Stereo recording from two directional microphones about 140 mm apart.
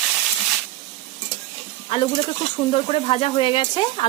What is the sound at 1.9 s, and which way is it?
Speech, 40° left (ahead or behind).